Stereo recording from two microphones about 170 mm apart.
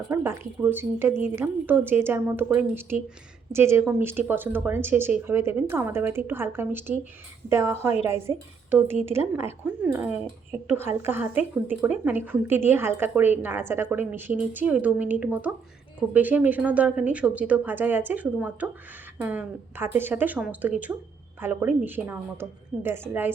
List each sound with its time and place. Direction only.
0.1 s a woman's voice: 15° right (ahead or behind)
8.7 s speech: 40° left (ahead or behind)
9.0 s a woman's voice: 15° right (ahead or behind)